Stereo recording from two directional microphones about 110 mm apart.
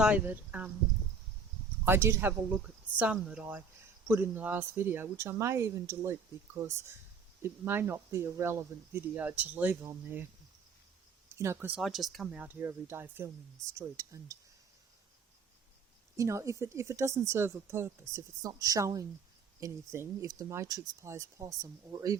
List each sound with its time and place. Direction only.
0.0 s speech: 10° right (ahead or behind)
1.8 s speech: 20° right (ahead or behind)
11.3 s speech: 25° right (ahead or behind)
11.8 s speech: centre (ahead or behind)
12.4 s speech: 20° right (ahead or behind)
16.1 s speech: 25° right (ahead or behind)